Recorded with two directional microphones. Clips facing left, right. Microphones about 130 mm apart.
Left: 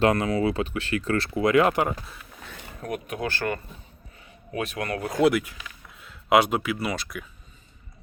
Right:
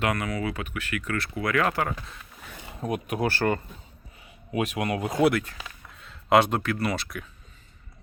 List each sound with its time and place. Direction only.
0.0 s speech: 30° left (ahead or behind)
2.5 s a sound: 15° right (ahead or behind)
3.2 s speech: 30° right (ahead or behind)
5.3 s speech: 10° left (ahead or behind)